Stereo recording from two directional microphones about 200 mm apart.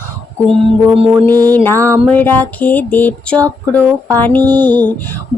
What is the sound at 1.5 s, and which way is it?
Speech, 10° left (ahead or behind).